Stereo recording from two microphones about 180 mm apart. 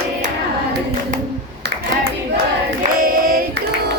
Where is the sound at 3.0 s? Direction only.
50° right (ahead or behind).